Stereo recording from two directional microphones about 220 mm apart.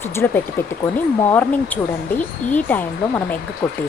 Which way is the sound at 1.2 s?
10° left (ahead or behind).